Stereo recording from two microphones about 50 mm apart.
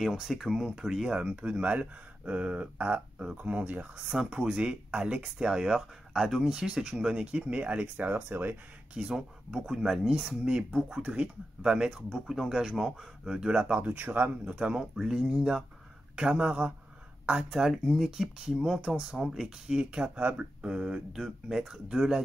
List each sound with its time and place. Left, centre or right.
0.0 s speech: centre; by 3.9 s right
3.9 s speech: centre; by 8.5 s right
8.9 s speech: centre
10.4 s speech: centre
11.0 s speech: right
11.6 s speech: centre
13.8 s speech: right
14.4 s speech: right
17.5 s speech: centre
19.7 s speech: centre
20.2 s speech: right
20.6 s speech: centre